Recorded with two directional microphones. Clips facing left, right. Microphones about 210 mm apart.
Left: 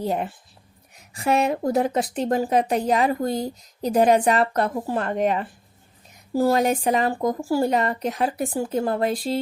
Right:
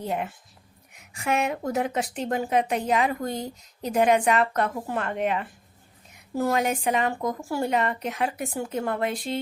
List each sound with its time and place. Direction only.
0.0 s a woman's voice: 35° left (ahead or behind)